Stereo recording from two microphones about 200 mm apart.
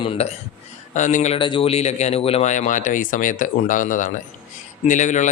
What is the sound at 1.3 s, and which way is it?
Speech, 25° left (ahead or behind).